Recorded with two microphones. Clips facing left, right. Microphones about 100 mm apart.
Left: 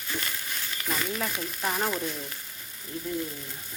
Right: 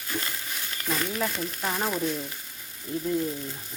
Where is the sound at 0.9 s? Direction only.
Centre (ahead or behind).